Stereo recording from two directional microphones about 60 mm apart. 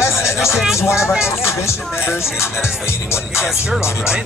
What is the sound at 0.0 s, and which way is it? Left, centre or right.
Music, left.